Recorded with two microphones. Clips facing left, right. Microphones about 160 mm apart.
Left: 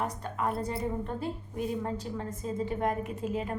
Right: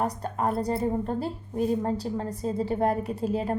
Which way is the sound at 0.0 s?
35° right (ahead or behind).